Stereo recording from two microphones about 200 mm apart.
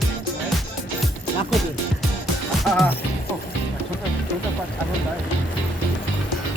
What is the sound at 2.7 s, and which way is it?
Speech, centre (ahead or behind).